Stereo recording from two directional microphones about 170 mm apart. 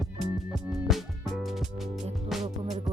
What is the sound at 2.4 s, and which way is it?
Music, 20° right (ahead or behind).